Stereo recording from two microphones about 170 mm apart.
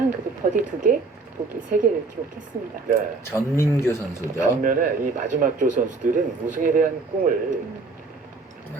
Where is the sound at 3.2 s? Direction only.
15° left (ahead or behind).